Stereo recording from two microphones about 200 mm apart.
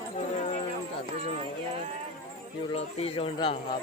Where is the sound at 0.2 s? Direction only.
35° left (ahead or behind).